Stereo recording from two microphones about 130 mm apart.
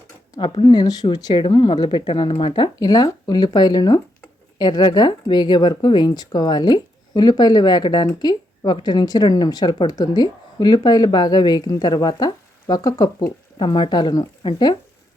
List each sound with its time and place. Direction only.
0.3 s speech: 35° left (ahead or behind)